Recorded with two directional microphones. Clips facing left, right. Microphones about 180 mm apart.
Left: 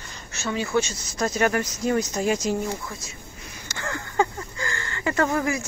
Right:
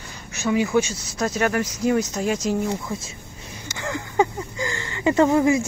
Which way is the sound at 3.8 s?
15° right (ahead or behind).